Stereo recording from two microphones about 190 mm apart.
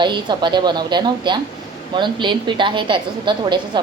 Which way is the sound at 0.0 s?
25° right (ahead or behind).